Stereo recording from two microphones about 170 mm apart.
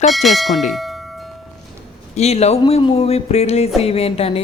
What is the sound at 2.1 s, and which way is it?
Speech, 40° left (ahead or behind).